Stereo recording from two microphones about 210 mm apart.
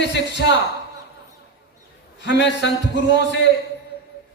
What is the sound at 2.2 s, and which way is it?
Speech, 60° left (ahead or behind).